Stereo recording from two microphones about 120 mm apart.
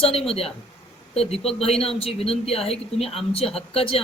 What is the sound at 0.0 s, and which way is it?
Speech, 55° left (ahead or behind).